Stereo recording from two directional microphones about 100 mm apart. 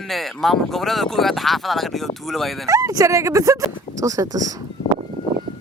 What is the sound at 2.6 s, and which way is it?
Speech, 35° right (ahead or behind).